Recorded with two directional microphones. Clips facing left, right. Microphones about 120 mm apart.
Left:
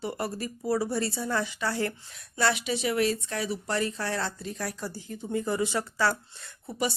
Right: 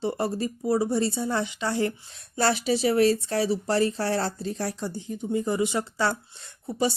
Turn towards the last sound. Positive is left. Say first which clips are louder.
# right 4 dB
turn(degrees=-25)  # may be behind; listen again after turning